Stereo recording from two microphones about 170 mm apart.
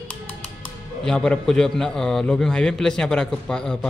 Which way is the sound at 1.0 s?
5° left (ahead or behind).